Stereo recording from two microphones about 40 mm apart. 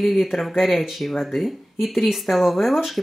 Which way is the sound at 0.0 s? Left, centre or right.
Centre.